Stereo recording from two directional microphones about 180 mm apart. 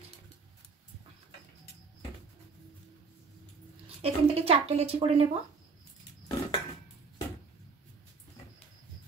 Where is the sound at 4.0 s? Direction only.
35° right (ahead or behind).